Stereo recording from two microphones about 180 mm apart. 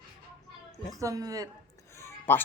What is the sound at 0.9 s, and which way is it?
Speech, 20° right (ahead or behind).